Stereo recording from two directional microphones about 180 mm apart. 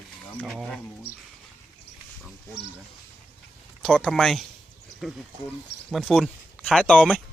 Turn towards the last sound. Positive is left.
turn(degrees=5)  # may be behind; listen again after turning